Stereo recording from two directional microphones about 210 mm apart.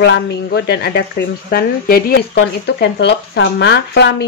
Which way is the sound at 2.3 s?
55° left (ahead or behind).